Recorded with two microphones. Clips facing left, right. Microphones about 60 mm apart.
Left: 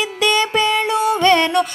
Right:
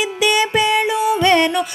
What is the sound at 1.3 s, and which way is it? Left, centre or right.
Music, right.